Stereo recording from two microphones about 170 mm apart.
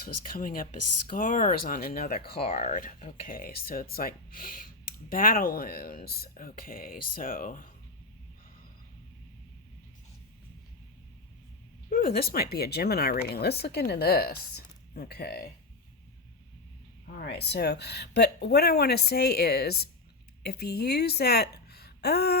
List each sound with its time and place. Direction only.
0.0 s speech: 55° left (ahead or behind)
2.4 s speech: 40° left (ahead or behind)
11.9 s speech: 60° left (ahead or behind)
17.2 s a woman's voice: 75° left (ahead or behind)